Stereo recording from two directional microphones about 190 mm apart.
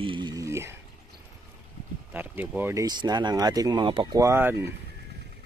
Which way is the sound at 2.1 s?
10° right (ahead or behind).